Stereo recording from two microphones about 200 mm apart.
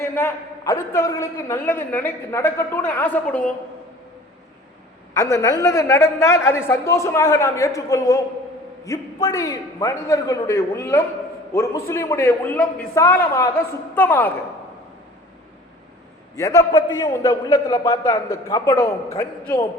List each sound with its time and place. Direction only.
0.0 s a man's voice: 15° left (ahead or behind)
5.1 s a man's voice: 15° left (ahead or behind)
16.3 s a man's voice: 15° left (ahead or behind)